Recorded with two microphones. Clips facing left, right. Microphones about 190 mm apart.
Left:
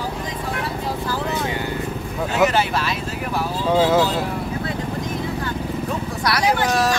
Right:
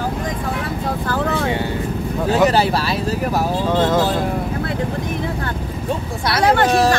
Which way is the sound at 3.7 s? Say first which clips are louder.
Left 2 dB; 10° left (ahead or behind).